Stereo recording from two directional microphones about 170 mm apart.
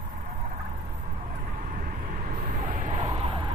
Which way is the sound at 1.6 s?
50° right (ahead or behind).